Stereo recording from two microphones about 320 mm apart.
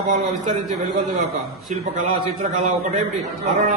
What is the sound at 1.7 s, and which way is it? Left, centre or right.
Speech, right.